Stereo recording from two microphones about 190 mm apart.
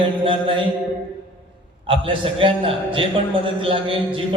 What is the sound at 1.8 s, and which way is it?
A man's voice, 25° right (ahead or behind).